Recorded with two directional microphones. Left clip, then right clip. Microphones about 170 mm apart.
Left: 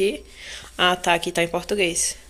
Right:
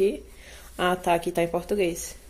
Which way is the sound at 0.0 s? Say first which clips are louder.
Left 2 dB; centre (ahead or behind).